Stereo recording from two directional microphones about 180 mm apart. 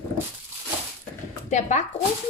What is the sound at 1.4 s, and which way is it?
Speech, 40° left (ahead or behind).